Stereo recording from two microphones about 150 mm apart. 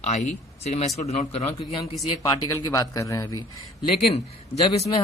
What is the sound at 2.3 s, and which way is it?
Speech, 25° left (ahead or behind).